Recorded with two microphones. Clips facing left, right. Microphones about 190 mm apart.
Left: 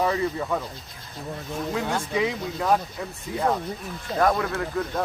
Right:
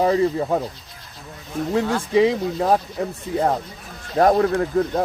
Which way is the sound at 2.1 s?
35° right (ahead or behind).